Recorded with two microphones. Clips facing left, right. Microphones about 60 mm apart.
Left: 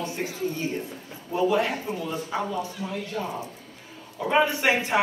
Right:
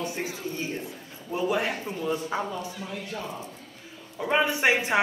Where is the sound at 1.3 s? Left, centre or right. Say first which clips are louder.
Left 3 dB; right.